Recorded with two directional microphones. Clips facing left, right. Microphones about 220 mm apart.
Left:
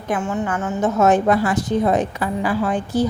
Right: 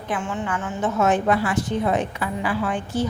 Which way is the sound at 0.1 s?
40° left (ahead or behind).